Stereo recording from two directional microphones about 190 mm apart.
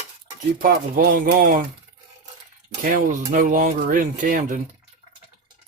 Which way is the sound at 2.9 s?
45° right (ahead or behind).